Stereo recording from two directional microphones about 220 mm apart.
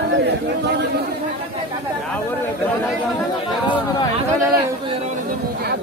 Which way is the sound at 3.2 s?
20° left (ahead or behind).